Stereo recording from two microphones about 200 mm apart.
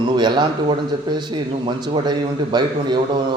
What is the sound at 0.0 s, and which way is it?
A man's voice, 20° right (ahead or behind).